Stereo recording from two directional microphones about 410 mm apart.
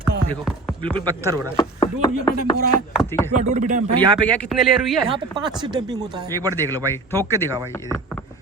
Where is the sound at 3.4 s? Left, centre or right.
Centre.